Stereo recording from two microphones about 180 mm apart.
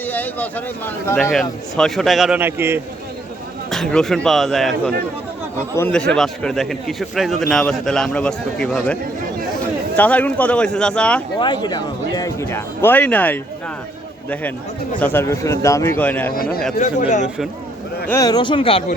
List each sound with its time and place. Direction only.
0.0 s a man's voice: 10° left (ahead or behind); by 2.8 s 10° right (ahead or behind)
3.7 s a man's voice: centre (ahead or behind)
5.7 s a man's voice: 10° left (ahead or behind)
11.3 s speech: 25° left (ahead or behind); by 13.4 s 10° left (ahead or behind)
15.0 s speech: 15° left (ahead or behind)
16.3 s speech: 55° left (ahead or behind)
16.7 s speech: 45° left (ahead or behind)
18.1 s speech: 20° left (ahead or behind)